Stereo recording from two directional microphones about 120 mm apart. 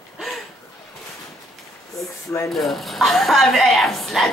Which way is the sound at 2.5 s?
Centre (ahead or behind).